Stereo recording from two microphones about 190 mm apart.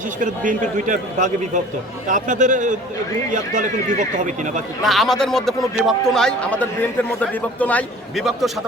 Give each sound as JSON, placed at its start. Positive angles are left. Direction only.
{"t": 0.2, "sound": "a man's voice", "side_deg": -45}
{"t": 4.8, "sound": "a man's voice", "side_deg": 0}